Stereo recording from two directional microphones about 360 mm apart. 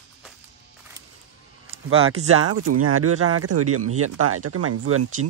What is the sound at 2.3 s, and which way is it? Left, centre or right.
Speech, right.